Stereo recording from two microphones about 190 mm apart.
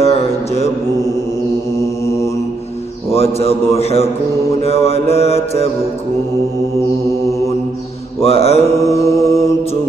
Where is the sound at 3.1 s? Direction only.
30° left (ahead or behind).